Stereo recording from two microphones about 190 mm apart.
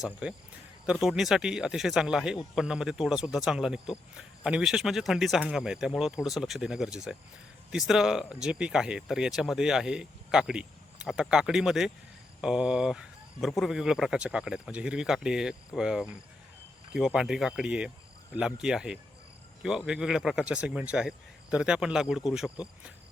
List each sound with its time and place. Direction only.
0.0 s speech: 5° right (ahead or behind)